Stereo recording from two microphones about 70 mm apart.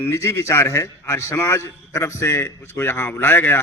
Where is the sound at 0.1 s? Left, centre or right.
Left.